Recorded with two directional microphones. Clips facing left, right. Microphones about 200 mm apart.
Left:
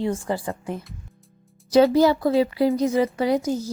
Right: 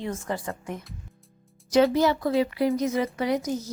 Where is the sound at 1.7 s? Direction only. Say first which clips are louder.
Left 4 dB; 35° left (ahead or behind).